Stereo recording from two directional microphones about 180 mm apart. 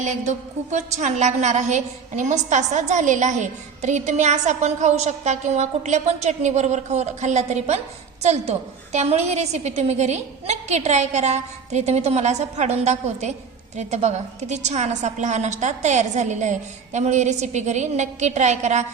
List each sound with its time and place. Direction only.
0.0 s a woman's voice: 40° right (ahead or behind)